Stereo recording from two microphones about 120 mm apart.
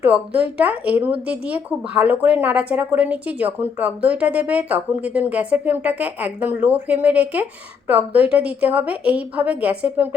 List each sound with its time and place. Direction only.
0.0 s speech: 15° right (ahead or behind)